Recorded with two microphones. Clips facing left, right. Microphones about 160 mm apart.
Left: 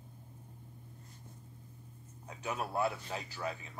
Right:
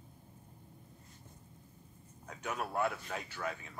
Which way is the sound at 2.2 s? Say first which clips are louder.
Left 1 dB; 30° left (ahead or behind).